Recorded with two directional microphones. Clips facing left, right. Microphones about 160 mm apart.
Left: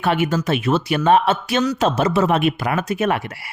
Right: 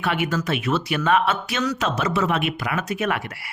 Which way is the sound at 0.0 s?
30° left (ahead or behind).